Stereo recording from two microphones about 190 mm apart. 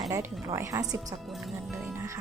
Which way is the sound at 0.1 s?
15° right (ahead or behind).